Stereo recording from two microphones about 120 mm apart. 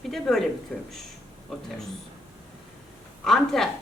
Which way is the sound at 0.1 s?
5° left (ahead or behind).